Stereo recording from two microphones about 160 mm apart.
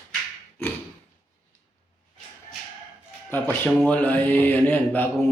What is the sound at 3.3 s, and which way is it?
Mantra, 10° left (ahead or behind).